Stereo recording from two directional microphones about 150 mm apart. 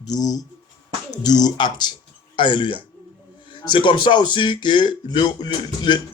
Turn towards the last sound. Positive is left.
turn(degrees=30)  # may be behind; listen again after turning